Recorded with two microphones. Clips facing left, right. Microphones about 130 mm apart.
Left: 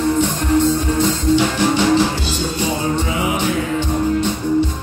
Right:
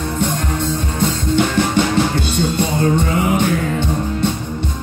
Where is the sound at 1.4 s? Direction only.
55° right (ahead or behind).